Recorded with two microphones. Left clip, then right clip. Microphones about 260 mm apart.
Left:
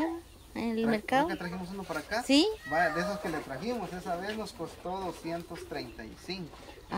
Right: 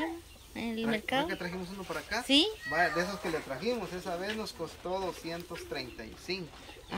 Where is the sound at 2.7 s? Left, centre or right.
Centre.